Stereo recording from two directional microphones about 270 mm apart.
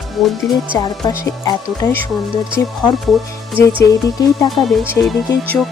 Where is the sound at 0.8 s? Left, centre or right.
Centre.